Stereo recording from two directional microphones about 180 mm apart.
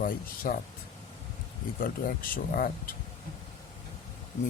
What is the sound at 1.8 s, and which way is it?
Speech, 50° left (ahead or behind).